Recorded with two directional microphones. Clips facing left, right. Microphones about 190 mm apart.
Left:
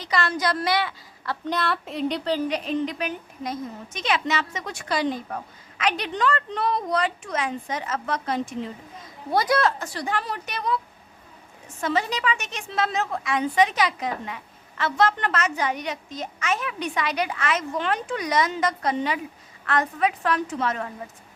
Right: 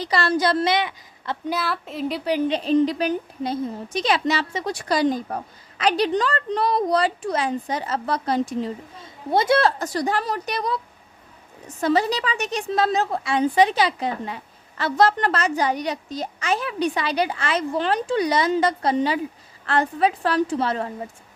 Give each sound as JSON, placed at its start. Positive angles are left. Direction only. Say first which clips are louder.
{"t": 0.0, "sound": "a woman's voice", "louder": "right 4 dB", "side_deg": -35}
{"t": 1.5, "sound": "a woman's voice", "louder": "even", "side_deg": -5}
{"t": 2.5, "sound": "a woman's voice", "louder": "right 7 dB", "side_deg": -30}
{"t": 11.8, "sound": "a woman's voice", "louder": "right 5 dB", "side_deg": -35}